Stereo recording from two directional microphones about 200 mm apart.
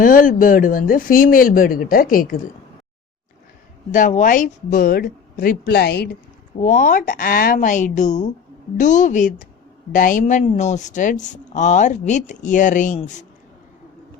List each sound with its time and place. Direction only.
0.0 s speech: 40° left (ahead or behind)
3.9 s speech: 40° left (ahead or behind)
6.6 s a woman's voice: 40° left (ahead or behind)